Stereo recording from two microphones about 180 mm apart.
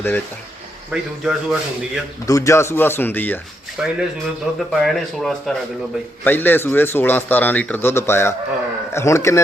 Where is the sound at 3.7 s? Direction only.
5° right (ahead or behind).